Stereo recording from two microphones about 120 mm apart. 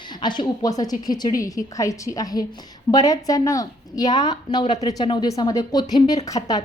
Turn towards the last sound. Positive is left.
turn(degrees=30)  # may be behind; listen again after turning